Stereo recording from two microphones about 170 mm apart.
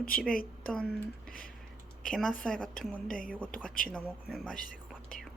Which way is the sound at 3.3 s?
10° left (ahead or behind).